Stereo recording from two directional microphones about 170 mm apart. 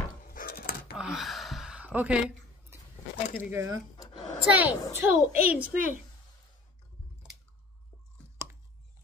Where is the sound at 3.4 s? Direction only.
15° right (ahead or behind).